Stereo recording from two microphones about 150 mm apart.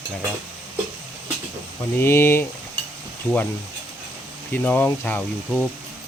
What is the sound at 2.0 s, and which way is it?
Speech, 15° left (ahead or behind).